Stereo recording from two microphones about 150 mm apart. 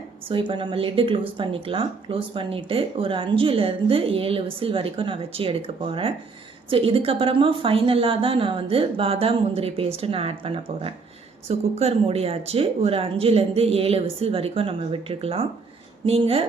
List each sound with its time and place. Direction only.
0.3 s speech: 35° right (ahead or behind)